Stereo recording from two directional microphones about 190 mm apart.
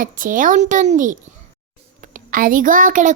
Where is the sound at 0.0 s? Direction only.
45° right (ahead or behind).